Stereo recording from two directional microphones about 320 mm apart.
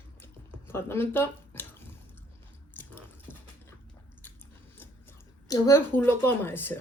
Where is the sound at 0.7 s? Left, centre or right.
Centre.